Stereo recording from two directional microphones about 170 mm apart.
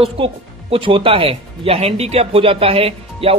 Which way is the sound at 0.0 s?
35° right (ahead or behind).